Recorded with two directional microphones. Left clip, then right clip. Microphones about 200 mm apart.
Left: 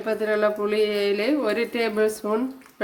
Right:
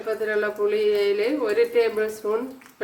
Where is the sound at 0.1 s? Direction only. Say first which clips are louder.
Left 2 dB; 50° left (ahead or behind).